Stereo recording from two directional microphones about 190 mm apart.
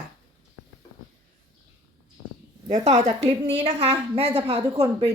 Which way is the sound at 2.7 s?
35° right (ahead or behind).